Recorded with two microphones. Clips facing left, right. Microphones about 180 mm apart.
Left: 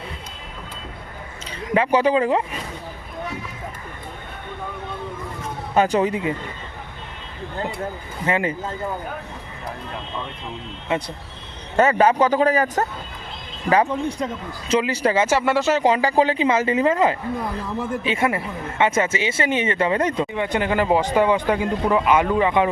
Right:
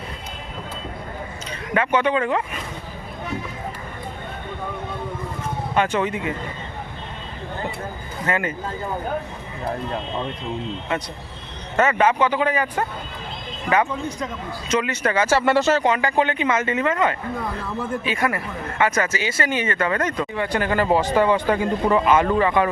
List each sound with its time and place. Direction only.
1.7 s speech: 30° left (ahead or behind)
5.7 s speech: 35° left (ahead or behind)
8.3 s speech: 25° left (ahead or behind)
11.8 s speech: 35° left (ahead or behind)
15.4 s speech: 10° left (ahead or behind)
15.8 s speech: 30° left (ahead or behind)
20.3 s speech: 20° left (ahead or behind)